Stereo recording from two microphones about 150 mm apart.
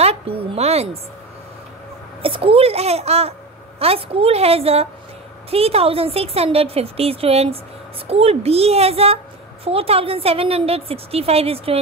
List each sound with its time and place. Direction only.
0.0 s speech: 40° right (ahead or behind)
2.2 s a woman's voice: 40° right (ahead or behind)